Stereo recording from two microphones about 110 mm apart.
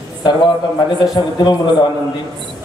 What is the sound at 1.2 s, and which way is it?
Speech, 45° left (ahead or behind).